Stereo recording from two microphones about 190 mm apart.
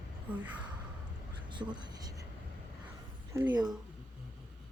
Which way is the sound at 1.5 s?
25° right (ahead or behind).